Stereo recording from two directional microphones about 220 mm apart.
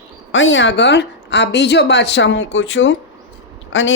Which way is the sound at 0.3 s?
60° left (ahead or behind).